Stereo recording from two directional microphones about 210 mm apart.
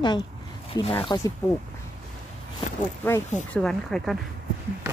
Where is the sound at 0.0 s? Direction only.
20° left (ahead or behind).